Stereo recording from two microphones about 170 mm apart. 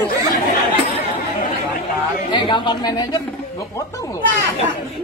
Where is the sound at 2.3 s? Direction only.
25° left (ahead or behind).